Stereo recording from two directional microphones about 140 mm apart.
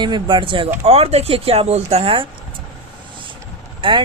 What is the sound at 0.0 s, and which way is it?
Speech, 35° right (ahead or behind).